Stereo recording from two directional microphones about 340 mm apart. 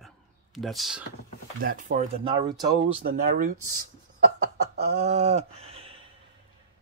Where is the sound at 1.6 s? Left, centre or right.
Right.